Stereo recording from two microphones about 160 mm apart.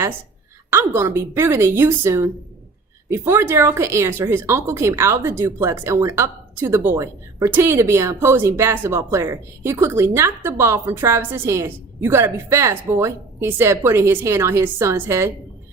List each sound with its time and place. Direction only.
0.7 s speech: 15° right (ahead or behind)